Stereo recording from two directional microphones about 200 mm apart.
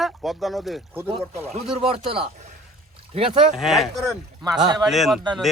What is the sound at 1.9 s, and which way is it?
Speech, 25° right (ahead or behind).